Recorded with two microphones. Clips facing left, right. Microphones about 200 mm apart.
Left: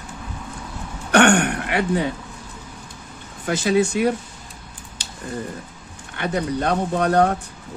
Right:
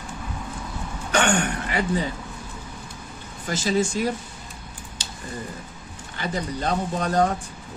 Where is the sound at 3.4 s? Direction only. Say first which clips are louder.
Left 4 dB; 60° left (ahead or behind).